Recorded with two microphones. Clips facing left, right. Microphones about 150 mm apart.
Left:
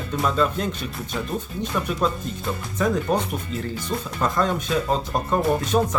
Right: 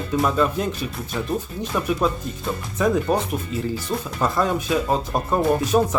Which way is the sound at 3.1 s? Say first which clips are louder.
Right 1 dB; 5° right (ahead or behind).